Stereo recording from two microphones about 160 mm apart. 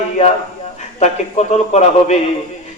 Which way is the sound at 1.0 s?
45° left (ahead or behind).